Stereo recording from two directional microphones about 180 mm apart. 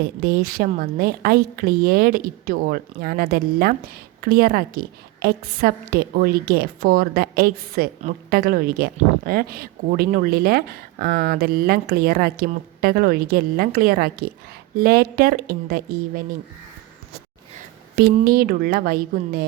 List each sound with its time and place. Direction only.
0.2 s speech: 55° right (ahead or behind)
17.9 s speech: 55° right (ahead or behind)